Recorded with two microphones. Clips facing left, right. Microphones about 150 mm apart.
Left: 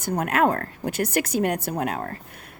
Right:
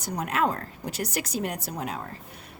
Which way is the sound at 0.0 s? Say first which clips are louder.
Left 5 dB; 55° left (ahead or behind).